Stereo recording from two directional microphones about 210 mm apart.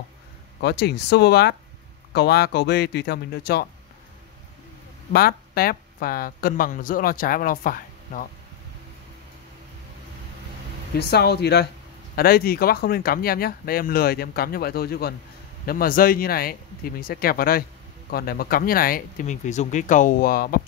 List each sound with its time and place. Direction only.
0.6 s speech: 50° left (ahead or behind)
5.1 s speech: 45° left (ahead or behind)
11.0 s speech: 50° left (ahead or behind)